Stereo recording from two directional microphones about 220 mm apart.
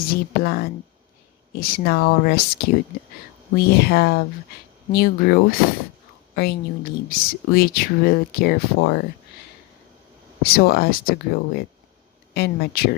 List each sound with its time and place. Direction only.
0.0 s speech: 45° left (ahead or behind)
10.4 s speech: 45° left (ahead or behind)
12.3 s speech: 45° left (ahead or behind)